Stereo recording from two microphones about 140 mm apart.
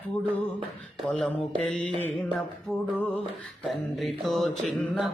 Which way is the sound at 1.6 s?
5° left (ahead or behind).